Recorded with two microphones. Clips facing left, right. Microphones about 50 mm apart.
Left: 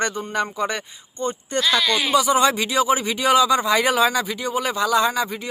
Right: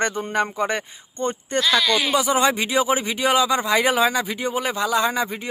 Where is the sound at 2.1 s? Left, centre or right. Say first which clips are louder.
Left 4 dB; centre.